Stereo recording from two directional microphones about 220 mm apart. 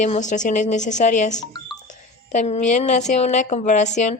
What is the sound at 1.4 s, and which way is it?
Speech, 20° left (ahead or behind).